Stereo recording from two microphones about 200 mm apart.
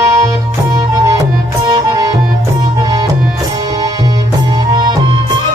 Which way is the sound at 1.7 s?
15° right (ahead or behind).